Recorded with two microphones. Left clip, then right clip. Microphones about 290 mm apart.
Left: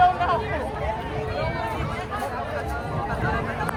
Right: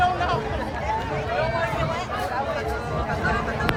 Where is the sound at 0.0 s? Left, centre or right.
Left.